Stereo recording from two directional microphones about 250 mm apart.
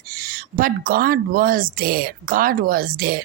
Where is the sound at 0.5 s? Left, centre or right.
Right.